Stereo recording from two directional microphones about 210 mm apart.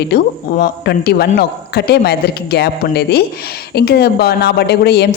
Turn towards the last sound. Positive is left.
turn(degrees=50)  # may be behind; listen again after turning